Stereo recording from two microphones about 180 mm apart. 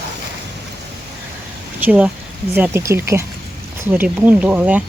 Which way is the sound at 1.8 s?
10° right (ahead or behind).